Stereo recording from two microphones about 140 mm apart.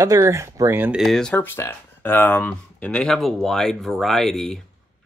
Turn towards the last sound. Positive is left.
turn(degrees=0)  # may be behind; listen again after turning